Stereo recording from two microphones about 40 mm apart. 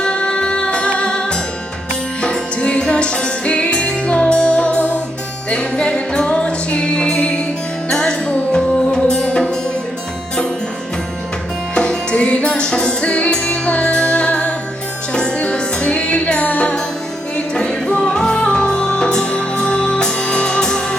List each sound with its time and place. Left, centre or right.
0.0 s music: left
5.5 s music: left
11.7 s music: left
13.9 s music: left